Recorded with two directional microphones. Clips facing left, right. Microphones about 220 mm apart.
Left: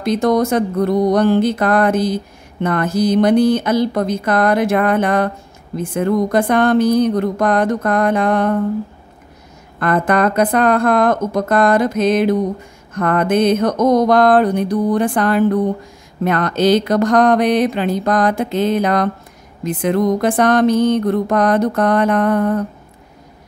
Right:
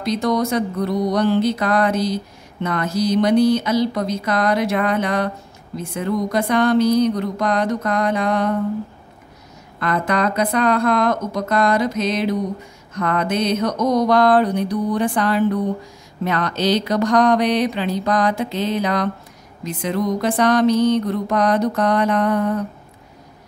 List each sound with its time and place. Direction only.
0.0 s music: 50° left (ahead or behind)
9.8 s music: 50° left (ahead or behind)